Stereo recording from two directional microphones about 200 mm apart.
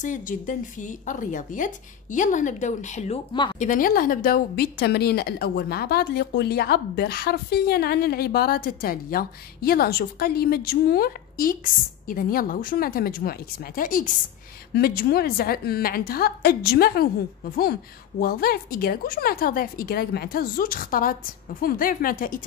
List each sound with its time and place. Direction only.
0.0 s a woman's voice: 40° left (ahead or behind)
18.2 s a woman's voice: 50° left (ahead or behind)